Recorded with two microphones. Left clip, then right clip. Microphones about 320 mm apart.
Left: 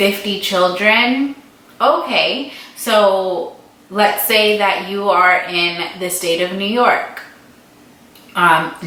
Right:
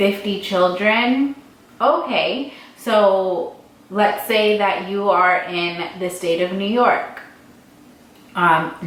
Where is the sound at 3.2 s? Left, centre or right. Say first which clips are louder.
Left 1 dB; right.